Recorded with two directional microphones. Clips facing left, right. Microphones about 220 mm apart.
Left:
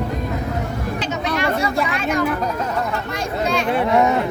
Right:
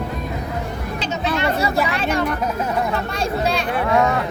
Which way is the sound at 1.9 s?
30° right (ahead or behind).